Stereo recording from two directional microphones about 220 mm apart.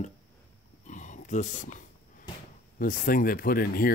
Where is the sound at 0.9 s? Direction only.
35° left (ahead or behind).